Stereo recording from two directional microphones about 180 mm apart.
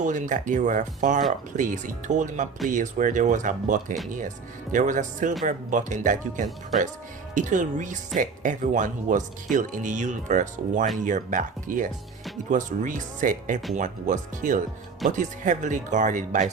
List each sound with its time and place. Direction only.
0.0 s speech: 45° right (ahead or behind)